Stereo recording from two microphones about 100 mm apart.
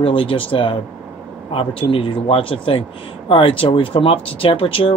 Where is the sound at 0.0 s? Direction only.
60° left (ahead or behind).